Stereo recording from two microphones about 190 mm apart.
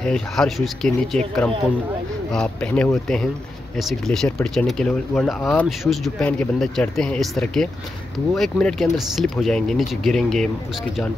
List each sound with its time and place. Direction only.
0.0 s speech: 5° left (ahead or behind)